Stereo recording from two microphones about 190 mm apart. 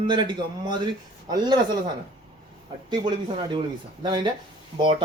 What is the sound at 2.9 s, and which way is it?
Speech, 25° right (ahead or behind).